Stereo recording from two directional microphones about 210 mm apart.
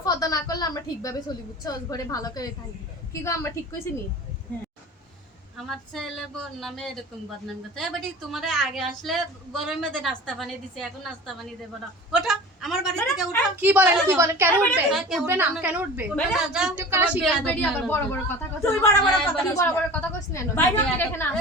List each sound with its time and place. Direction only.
0.0 s a sound: 15° left (ahead or behind)
1.6 s a woman's voice: 15° left (ahead or behind)
5.5 s a woman's voice: centre (ahead or behind)
14.6 s a woman's voice: centre (ahead or behind)
17.4 s a woman's voice: 5° left (ahead or behind)